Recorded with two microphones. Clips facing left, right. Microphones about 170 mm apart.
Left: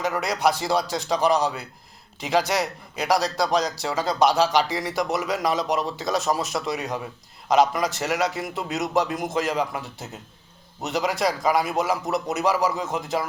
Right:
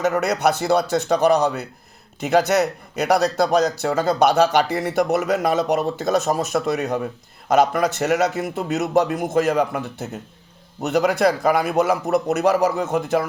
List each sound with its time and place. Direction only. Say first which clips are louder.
0.1 s speech: right 4 dB; 60° right (ahead or behind)